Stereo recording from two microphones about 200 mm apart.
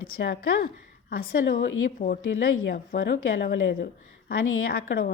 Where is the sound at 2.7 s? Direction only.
50° left (ahead or behind).